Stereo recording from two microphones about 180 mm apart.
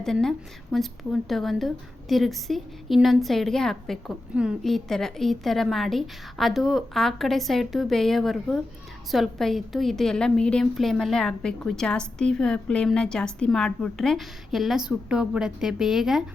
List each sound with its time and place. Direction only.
0.0 s speech: centre (ahead or behind)